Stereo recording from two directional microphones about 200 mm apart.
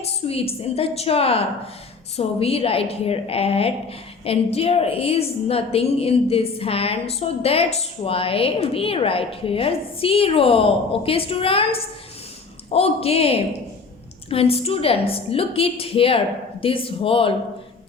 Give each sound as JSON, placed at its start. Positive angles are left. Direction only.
{"t": 0.3, "sound": "a woman's voice", "side_deg": 30}